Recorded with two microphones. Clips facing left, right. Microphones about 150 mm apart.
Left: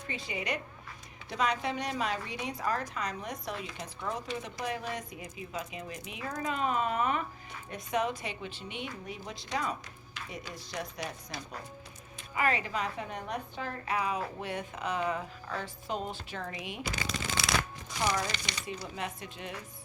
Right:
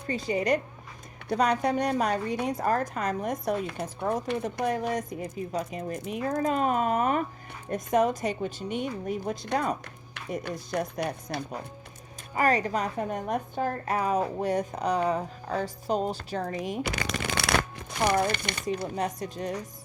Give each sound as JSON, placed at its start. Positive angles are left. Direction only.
{"t": 0.1, "sound": "a woman's voice", "side_deg": -40}
{"t": 12.3, "sound": "a woman's voice", "side_deg": -40}
{"t": 16.8, "sound": "shuffling cards", "side_deg": -65}
{"t": 18.9, "sound": "a woman's voice", "side_deg": -40}